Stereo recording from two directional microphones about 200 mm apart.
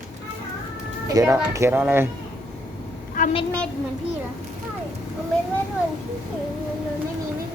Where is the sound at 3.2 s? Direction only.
40° left (ahead or behind).